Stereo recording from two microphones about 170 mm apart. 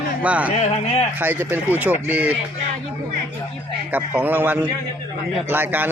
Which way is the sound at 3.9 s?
10° right (ahead or behind).